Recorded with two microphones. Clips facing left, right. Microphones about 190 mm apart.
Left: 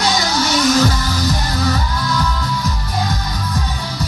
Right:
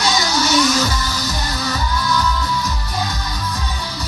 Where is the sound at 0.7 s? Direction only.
55° left (ahead or behind).